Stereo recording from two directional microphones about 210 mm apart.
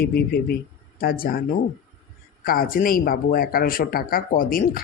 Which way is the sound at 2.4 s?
45° left (ahead or behind).